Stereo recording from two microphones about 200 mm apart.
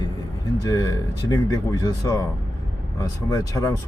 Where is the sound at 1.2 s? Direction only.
15° left (ahead or behind).